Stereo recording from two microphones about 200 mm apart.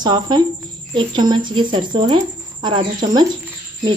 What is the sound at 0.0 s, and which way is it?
Speech, 20° right (ahead or behind).